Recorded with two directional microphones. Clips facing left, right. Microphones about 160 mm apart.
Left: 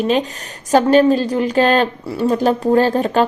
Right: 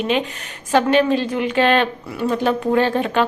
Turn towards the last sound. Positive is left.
turn(degrees=40)  # may be behind; listen again after turning